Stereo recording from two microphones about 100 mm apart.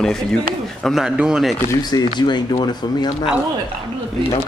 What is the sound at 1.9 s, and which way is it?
Speech, 45° left (ahead or behind).